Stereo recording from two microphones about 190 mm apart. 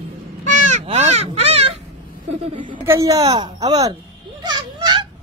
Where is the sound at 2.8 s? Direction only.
15° right (ahead or behind).